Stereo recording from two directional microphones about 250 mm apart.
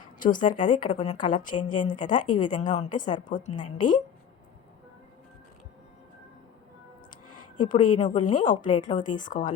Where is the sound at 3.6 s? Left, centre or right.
Left.